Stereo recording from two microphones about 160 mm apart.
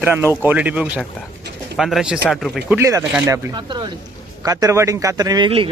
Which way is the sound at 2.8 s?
20° right (ahead or behind).